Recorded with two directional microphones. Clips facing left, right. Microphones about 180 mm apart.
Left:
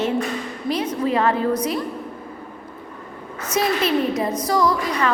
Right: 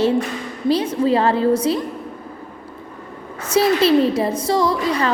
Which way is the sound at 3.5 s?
30° right (ahead or behind).